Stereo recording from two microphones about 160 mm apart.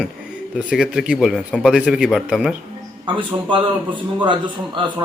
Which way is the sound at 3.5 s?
30° right (ahead or behind).